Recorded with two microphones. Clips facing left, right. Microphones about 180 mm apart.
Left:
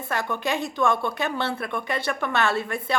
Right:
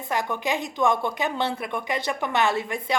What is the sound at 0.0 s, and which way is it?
A woman's voice, 15° right (ahead or behind).